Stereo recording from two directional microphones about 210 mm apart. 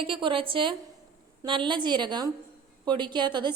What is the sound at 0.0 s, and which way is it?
A woman's voice, 25° right (ahead or behind).